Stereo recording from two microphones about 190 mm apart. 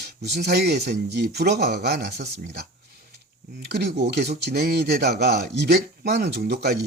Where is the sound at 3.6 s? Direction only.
60° right (ahead or behind).